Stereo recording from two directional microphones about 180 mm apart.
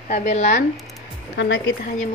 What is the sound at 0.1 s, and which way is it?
Speech, 45° left (ahead or behind).